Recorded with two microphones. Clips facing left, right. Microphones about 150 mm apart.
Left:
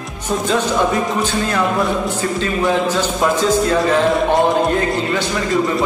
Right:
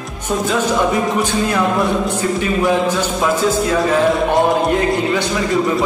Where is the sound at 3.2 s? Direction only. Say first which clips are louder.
Left 1 dB; 5° right (ahead or behind).